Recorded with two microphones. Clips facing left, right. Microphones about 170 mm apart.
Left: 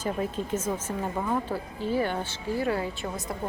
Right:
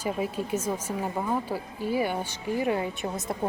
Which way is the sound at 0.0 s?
10° right (ahead or behind).